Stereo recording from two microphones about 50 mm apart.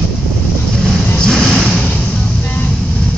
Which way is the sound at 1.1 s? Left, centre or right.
Centre.